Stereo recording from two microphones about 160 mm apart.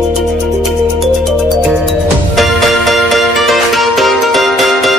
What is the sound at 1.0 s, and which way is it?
Music, centre (ahead or behind).